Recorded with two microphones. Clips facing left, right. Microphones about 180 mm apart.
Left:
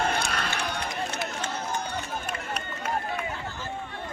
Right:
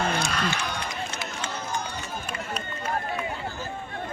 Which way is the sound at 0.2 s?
55° left (ahead or behind).